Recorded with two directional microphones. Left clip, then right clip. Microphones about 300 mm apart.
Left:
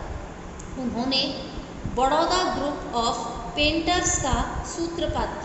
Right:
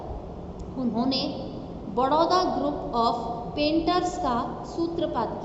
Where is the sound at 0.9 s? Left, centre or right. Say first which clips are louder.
Left 3 dB; centre.